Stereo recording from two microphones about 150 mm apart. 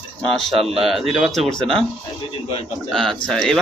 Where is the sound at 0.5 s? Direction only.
40° right (ahead or behind).